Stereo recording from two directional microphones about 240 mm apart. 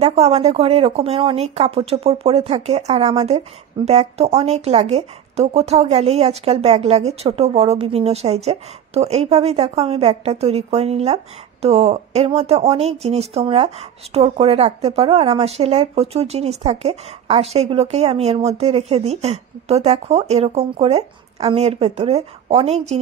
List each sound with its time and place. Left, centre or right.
0.0 s speech: right